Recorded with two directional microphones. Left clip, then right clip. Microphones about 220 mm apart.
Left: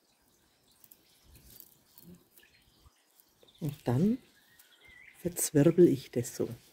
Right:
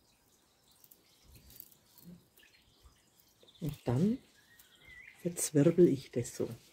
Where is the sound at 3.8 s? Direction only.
50° left (ahead or behind).